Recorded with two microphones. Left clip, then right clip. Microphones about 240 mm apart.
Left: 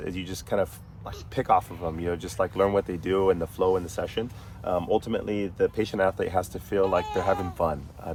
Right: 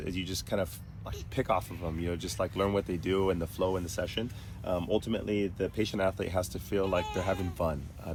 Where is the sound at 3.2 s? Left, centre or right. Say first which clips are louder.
Left 9 dB; left.